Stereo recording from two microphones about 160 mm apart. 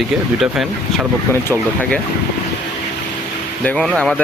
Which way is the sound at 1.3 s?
15° left (ahead or behind).